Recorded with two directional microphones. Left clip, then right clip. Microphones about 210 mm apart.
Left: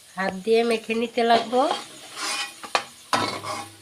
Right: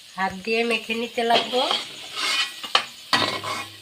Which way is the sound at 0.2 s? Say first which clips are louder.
Left 2 dB; 60° left (ahead or behind).